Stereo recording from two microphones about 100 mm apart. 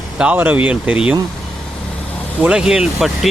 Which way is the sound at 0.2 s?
15° right (ahead or behind).